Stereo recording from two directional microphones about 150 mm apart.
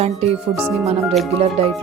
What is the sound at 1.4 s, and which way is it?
Music, 40° right (ahead or behind).